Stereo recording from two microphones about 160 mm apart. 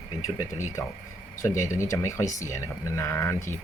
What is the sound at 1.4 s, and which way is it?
Speech, 20° left (ahead or behind).